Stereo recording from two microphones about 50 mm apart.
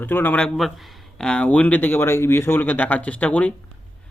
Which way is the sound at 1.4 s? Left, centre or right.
Left.